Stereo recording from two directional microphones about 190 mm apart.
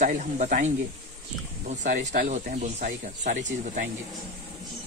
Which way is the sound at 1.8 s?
40° right (ahead or behind).